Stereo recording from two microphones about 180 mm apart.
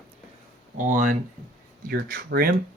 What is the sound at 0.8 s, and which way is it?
Speech, 45° right (ahead or behind).